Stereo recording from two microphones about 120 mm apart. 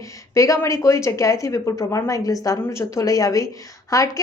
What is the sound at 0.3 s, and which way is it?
Speech, 25° left (ahead or behind).